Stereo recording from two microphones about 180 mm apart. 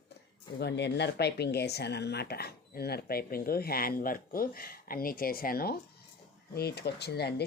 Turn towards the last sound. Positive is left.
turn(degrees=65)  # may be behind; listen again after turning